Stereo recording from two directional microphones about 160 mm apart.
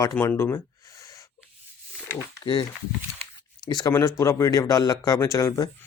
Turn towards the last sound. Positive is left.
turn(degrees=20)  # may be behind; listen again after turning